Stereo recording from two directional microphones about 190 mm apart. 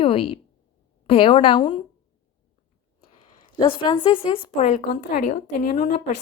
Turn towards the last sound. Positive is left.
turn(degrees=40)  # may be behind; listen again after turning